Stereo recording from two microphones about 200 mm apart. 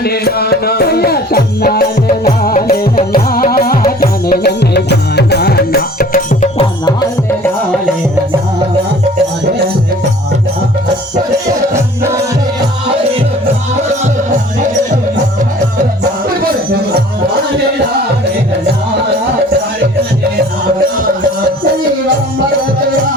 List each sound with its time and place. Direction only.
0.0 s music: 50° left (ahead or behind)
6.6 s music: 20° left (ahead or behind)
11.7 s music: 15° right (ahead or behind)